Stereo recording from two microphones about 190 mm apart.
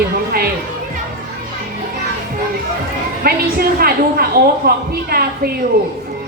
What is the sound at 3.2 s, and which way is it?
A woman's voice, 50° right (ahead or behind).